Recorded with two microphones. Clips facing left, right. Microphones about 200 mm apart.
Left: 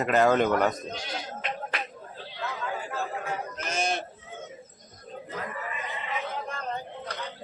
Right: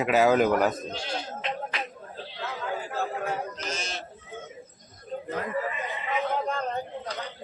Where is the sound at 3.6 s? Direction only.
55° left (ahead or behind).